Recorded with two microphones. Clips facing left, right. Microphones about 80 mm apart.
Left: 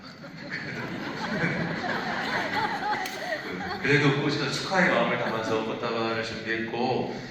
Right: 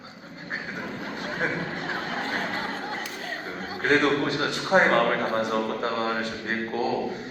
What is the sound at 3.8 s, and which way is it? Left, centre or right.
A man's voice, right.